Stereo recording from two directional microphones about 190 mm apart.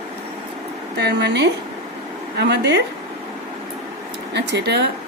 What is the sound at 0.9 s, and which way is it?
A woman's voice, 60° right (ahead or behind).